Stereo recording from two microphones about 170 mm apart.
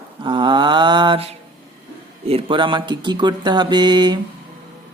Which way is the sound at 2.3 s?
30° right (ahead or behind).